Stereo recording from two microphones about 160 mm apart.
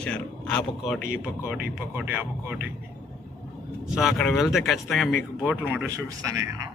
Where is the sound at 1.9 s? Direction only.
10° right (ahead or behind).